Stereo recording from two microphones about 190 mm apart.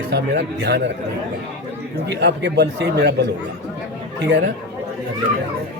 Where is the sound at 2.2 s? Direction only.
65° right (ahead or behind).